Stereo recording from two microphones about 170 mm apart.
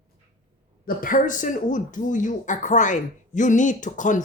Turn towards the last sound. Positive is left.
turn(degrees=50)  # may be behind; listen again after turning